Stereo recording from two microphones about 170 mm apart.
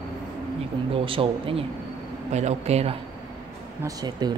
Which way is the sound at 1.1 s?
30° right (ahead or behind).